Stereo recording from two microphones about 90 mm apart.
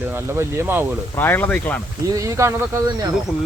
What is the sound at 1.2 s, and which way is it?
Speech, 20° left (ahead or behind).